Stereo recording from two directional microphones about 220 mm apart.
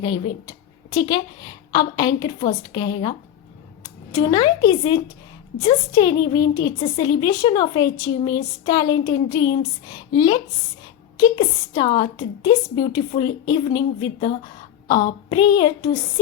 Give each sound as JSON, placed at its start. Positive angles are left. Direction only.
{"t": 0.0, "sound": "a woman's voice", "side_deg": 15}